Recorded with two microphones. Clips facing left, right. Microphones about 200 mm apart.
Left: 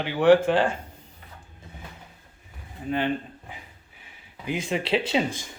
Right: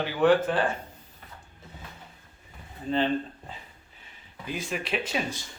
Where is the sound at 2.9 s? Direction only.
15° left (ahead or behind).